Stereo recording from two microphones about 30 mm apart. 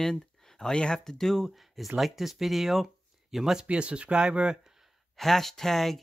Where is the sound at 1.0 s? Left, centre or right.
Centre.